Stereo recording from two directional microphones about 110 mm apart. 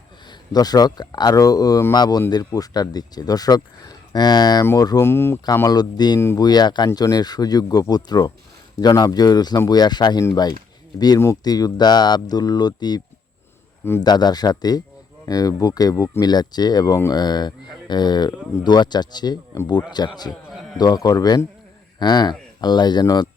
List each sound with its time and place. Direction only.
0.3 s speech: 35° left (ahead or behind)
4.9 s speech: 20° left (ahead or behind)
5.5 s speech: 35° left (ahead or behind)
6.1 s speech: 25° left (ahead or behind)
6.4 s speech: 40° left (ahead or behind)
11.4 s speech: 35° left (ahead or behind)
14.0 s speech: 40° left (ahead or behind)